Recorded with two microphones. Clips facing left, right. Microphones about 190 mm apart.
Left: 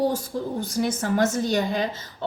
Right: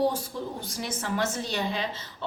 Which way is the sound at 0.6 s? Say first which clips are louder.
Left 9 dB; 45° left (ahead or behind).